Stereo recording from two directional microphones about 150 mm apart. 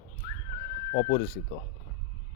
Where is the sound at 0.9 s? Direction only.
60° left (ahead or behind).